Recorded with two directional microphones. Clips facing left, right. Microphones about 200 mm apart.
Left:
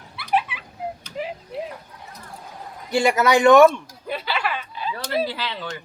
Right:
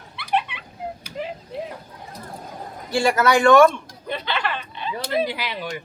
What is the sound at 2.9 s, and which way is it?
Speech, 20° left (ahead or behind).